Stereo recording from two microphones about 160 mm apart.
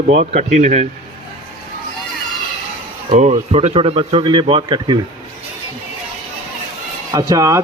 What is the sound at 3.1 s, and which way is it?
Speech, 45° right (ahead or behind).